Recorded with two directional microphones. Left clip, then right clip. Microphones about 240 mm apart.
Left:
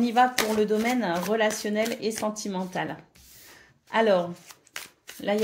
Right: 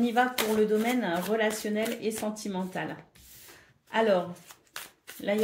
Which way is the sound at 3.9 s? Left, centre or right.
Left.